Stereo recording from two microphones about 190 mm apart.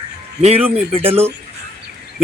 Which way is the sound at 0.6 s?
10° right (ahead or behind).